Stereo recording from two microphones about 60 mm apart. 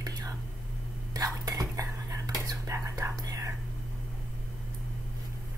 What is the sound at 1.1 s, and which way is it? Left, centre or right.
Whispering, right.